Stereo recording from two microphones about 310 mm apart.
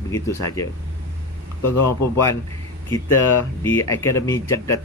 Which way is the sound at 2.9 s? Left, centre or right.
Centre.